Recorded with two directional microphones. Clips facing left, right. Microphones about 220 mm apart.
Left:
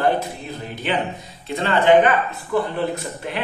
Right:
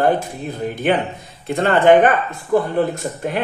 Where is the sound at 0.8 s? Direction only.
50° right (ahead or behind).